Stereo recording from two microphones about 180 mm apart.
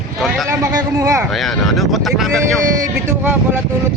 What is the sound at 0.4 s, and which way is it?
Speech, 20° right (ahead or behind).